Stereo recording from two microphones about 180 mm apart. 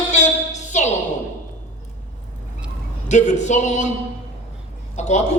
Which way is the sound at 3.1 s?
40° left (ahead or behind).